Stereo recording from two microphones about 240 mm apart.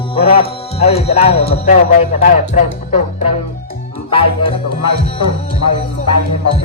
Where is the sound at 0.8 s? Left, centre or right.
Left.